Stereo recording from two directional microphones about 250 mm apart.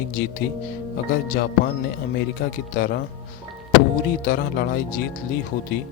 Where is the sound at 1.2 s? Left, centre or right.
Left.